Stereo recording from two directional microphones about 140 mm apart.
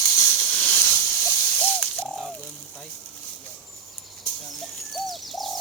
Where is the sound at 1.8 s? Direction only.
Centre (ahead or behind).